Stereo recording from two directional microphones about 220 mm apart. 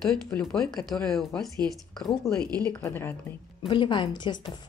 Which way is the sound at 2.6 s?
10° left (ahead or behind).